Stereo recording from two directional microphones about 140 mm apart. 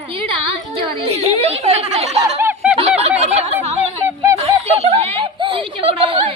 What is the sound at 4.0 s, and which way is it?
Honk, 20° right (ahead or behind).